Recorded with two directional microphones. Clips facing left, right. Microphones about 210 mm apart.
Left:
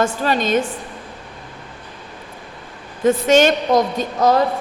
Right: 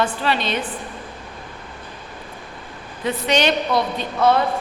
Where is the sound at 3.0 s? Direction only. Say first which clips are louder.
Left 7 dB; 45° left (ahead or behind).